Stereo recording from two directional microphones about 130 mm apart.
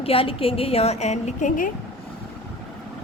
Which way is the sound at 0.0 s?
45° left (ahead or behind).